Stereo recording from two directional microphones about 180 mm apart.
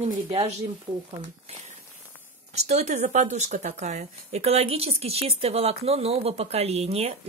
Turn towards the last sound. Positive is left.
turn(degrees=-35)  # may be behind; listen again after turning